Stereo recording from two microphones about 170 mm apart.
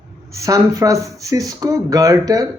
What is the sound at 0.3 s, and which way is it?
Speech, 20° right (ahead or behind).